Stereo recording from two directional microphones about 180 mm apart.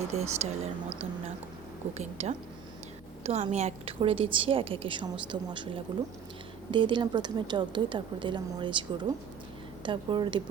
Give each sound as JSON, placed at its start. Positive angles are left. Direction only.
{"t": 0.1, "sound": "a woman's voice", "side_deg": -35}
{"t": 2.0, "sound": "a woman's voice", "side_deg": -35}